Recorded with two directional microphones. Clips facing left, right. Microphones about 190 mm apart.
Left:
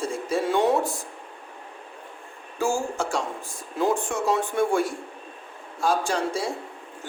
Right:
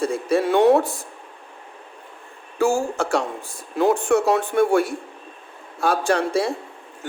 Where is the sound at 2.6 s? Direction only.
65° right (ahead or behind).